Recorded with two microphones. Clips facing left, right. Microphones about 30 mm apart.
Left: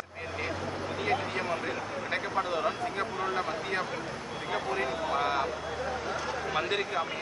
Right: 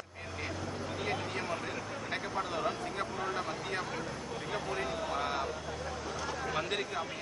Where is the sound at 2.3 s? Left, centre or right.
Centre.